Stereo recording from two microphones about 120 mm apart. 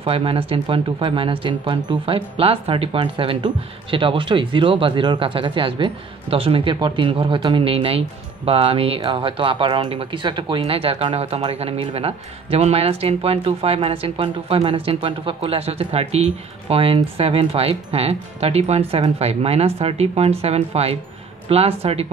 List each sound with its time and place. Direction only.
0.0 s speech: 50° right (ahead or behind)
10.6 s speech: 55° right (ahead or behind)